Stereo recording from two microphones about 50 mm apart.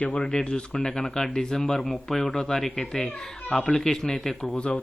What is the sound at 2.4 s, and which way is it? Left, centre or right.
Speech, centre.